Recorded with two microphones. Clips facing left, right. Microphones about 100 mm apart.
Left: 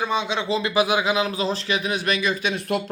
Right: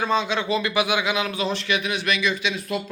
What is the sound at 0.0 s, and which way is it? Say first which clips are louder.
A man's voice: right 1 dB; 15° left (ahead or behind).